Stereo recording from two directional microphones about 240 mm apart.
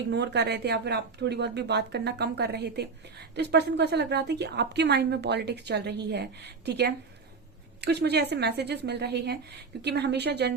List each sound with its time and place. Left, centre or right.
0.1 s a woman's voice: right